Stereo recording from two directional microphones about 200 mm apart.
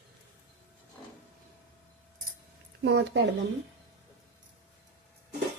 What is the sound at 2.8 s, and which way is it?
Speech, 60° right (ahead or behind).